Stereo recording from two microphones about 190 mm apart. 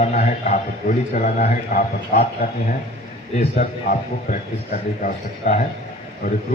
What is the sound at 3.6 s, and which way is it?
Speech, 40° left (ahead or behind).